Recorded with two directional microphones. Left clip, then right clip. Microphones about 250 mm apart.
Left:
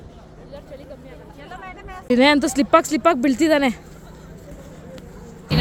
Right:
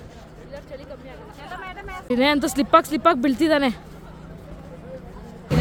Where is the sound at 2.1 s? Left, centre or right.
Centre.